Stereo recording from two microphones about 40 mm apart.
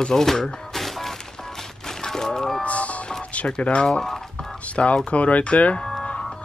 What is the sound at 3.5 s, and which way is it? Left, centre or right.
Speech, left.